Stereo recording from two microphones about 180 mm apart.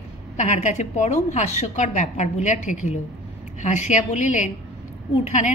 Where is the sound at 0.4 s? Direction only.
40° left (ahead or behind).